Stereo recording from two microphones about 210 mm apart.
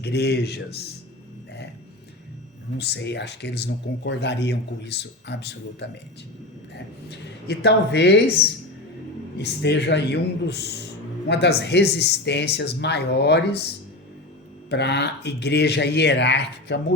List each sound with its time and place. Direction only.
0.0 s speech: 50° left (ahead or behind)
2.7 s speech: 55° left (ahead or behind)
9.4 s speech: 55° left (ahead or behind)
14.7 s speech: 55° left (ahead or behind)